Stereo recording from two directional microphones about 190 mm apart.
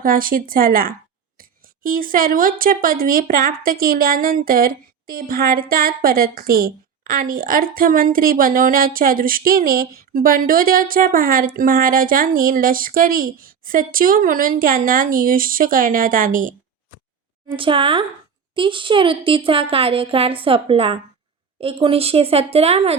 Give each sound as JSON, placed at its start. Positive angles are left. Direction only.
{"t": 0.0, "sound": "speech", "side_deg": -50}
{"t": 17.6, "sound": "a woman's voice", "side_deg": -25}